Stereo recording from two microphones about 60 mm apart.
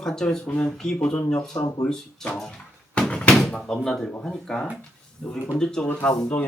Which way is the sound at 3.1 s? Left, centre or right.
Centre.